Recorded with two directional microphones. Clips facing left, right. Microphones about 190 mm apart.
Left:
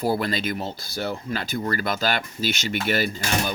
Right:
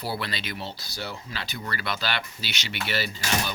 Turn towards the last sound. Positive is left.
turn(degrees=50)  # may be behind; listen again after turning